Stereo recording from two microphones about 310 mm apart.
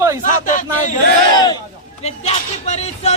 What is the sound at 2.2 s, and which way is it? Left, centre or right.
Speech, left.